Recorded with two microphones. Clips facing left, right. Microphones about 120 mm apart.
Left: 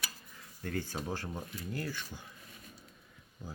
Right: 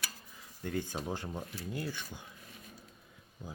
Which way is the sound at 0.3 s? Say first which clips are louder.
Right 1 dB; 15° right (ahead or behind).